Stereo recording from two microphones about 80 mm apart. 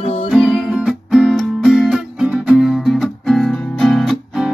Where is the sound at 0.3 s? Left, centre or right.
Centre.